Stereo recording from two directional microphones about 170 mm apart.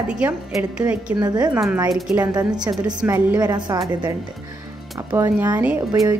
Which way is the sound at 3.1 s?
10° right (ahead or behind).